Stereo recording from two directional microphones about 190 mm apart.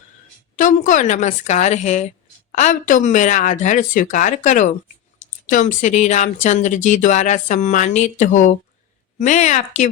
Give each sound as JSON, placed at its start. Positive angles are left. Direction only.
{"t": 0.5, "sound": "speech", "side_deg": 40}